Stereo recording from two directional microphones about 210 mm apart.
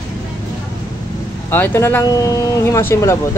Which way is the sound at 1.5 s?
10° left (ahead or behind).